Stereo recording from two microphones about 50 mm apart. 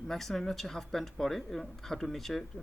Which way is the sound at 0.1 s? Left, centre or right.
Centre.